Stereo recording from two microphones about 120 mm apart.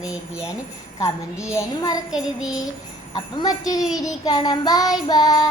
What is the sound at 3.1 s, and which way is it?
Child singing, 40° left (ahead or behind).